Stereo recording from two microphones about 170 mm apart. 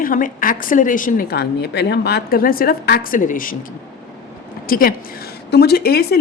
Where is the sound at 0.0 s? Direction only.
55° left (ahead or behind).